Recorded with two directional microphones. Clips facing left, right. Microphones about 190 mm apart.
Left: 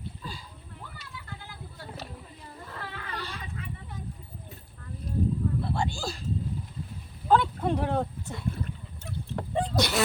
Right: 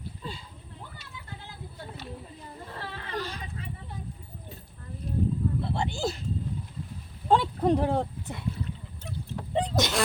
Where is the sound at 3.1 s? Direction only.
45° right (ahead or behind).